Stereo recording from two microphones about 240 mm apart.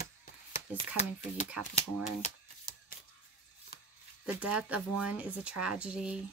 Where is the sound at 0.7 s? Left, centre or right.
Left.